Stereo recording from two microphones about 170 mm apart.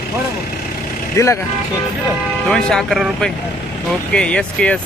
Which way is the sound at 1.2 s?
15° left (ahead or behind).